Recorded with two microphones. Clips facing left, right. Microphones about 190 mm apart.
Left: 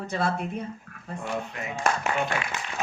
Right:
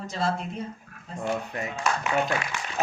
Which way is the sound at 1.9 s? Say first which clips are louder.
Left 2 dB; 50° left (ahead or behind).